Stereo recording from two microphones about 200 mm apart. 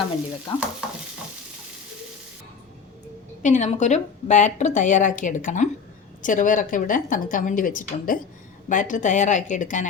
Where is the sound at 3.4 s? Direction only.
35° left (ahead or behind).